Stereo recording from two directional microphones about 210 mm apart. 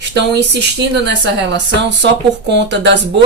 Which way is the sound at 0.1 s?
55° right (ahead or behind).